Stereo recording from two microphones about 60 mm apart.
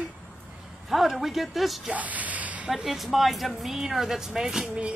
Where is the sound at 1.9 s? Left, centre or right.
Right.